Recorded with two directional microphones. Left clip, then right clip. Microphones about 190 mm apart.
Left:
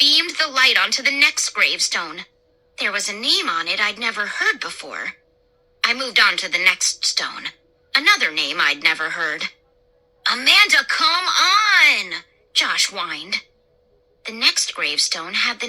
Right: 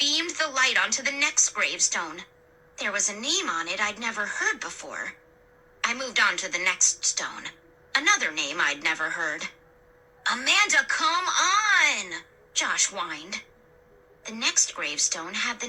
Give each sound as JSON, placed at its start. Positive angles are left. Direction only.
{"t": 0.0, "sound": "a woman's voice", "side_deg": 30}